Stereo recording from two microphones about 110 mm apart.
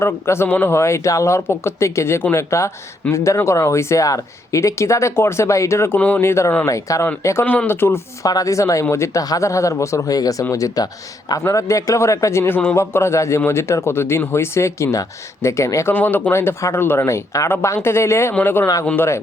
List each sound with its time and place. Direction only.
0.0 s a man's voice: 25° left (ahead or behind)
7.4 s a man's voice: 15° left (ahead or behind)